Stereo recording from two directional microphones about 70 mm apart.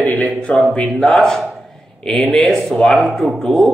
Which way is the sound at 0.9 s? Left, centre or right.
Centre.